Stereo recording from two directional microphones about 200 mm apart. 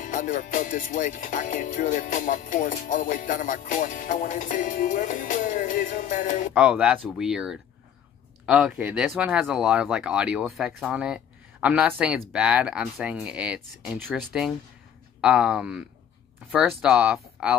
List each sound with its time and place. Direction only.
0.0 s speech: 40° left (ahead or behind)
6.5 s speech: 5° right (ahead or behind)